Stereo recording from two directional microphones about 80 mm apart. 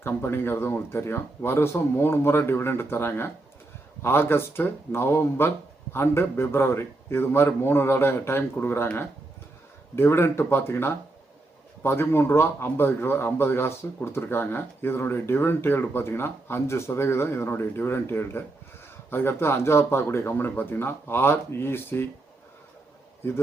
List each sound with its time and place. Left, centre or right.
0.0 s speech: left
9.9 s speech: left